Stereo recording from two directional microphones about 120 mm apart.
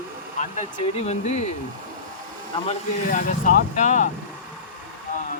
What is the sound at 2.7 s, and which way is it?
Speech, 90° left.